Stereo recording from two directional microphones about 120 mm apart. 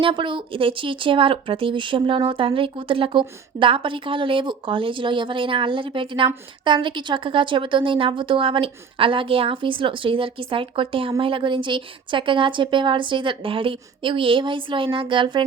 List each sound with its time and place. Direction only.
0.0 s speech: 45° right (ahead or behind)